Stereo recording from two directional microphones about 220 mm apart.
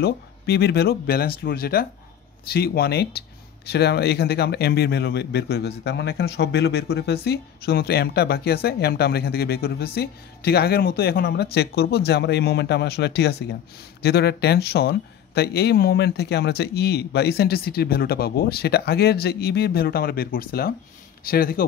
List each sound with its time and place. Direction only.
0.0 s speech: 45° left (ahead or behind)